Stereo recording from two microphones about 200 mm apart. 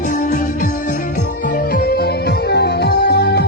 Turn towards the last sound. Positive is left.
turn(degrees=55)  # may be behind; listen again after turning